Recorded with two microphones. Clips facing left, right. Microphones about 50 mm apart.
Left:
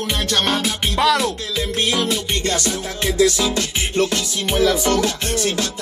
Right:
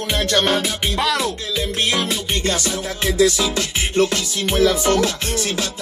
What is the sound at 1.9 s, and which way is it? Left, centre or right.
Music, centre.